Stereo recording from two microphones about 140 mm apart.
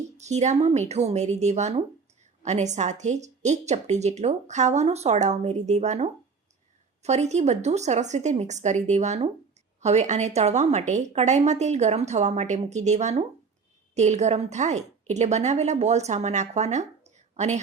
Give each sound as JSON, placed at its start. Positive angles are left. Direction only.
{"t": 0.2, "sound": "a woman's voice", "side_deg": -55}